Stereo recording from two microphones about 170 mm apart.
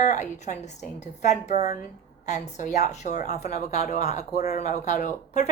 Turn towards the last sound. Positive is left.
turn(degrees=45)  # may be behind; listen again after turning